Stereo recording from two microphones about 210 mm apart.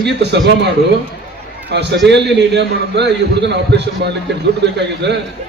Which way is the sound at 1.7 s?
55° right (ahead or behind).